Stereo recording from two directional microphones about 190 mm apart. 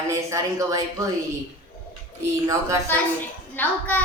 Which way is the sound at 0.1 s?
15° right (ahead or behind).